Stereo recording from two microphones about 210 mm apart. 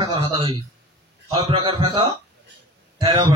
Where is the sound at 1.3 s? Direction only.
25° right (ahead or behind).